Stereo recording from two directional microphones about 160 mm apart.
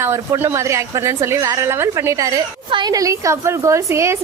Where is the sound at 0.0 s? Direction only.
15° right (ahead or behind).